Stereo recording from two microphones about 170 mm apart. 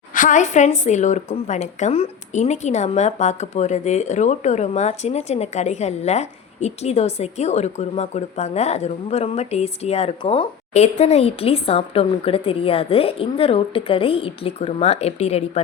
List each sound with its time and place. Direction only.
0.1 s a woman's voice: 50° left (ahead or behind)